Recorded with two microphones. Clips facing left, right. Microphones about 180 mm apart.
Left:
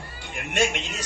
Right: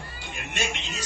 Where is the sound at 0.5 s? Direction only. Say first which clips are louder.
Left 8 dB; 60° left (ahead or behind).